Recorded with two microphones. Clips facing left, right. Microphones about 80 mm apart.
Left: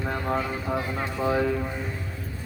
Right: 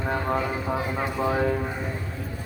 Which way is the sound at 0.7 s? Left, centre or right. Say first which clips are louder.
Right 2 dB; centre.